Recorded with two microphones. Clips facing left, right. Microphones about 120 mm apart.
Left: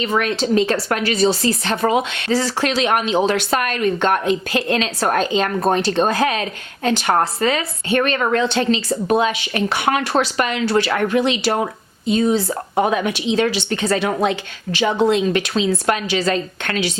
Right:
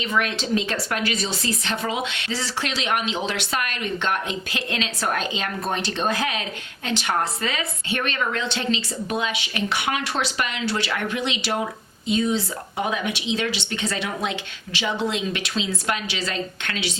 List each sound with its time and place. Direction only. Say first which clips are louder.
0.0 s a woman's voice: left 5 dB; 40° left (ahead or behind)